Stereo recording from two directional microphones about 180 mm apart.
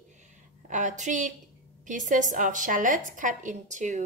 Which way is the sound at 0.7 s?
45° right (ahead or behind).